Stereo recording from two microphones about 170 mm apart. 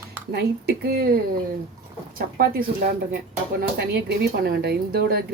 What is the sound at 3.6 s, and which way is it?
A woman's voice, 70° right (ahead or behind).